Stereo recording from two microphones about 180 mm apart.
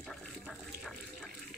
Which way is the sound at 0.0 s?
Centre (ahead or behind).